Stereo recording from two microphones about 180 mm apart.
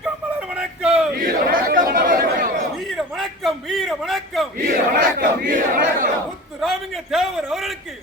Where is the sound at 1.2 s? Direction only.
55° right (ahead or behind).